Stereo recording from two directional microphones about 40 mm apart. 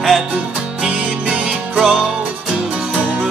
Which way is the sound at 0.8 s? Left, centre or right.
Centre.